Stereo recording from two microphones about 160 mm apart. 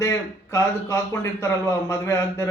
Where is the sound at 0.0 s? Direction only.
20° left (ahead or behind).